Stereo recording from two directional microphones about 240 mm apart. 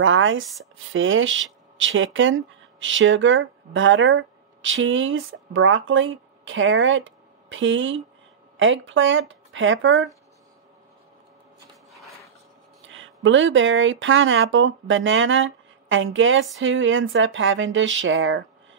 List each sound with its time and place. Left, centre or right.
0.0 s speech: right
12.8 s speech: right